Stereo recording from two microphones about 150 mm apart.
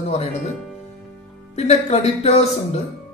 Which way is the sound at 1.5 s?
50° left (ahead or behind).